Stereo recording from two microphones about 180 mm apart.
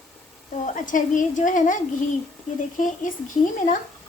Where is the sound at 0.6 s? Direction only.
45° left (ahead or behind).